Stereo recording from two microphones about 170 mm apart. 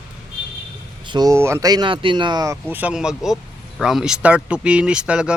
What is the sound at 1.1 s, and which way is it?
Speech, 25° right (ahead or behind).